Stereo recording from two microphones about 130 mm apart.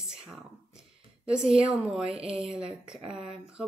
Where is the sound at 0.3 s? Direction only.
5° right (ahead or behind).